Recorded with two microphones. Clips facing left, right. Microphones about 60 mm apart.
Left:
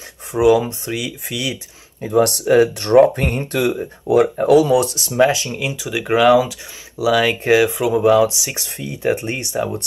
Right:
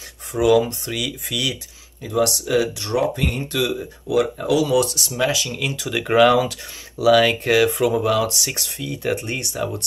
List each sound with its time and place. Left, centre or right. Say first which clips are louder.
0.3 s speech: left 2 dB; left
5.5 s speech: left 2 dB; centre
8.0 s speech: left 7 dB; left
8.4 s speech: even; centre
8.6 s speech: left 5 dB; left